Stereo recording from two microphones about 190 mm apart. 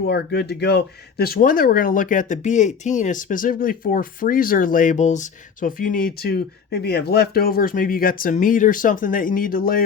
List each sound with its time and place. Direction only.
0.1 s speech: 60° left (ahead or behind)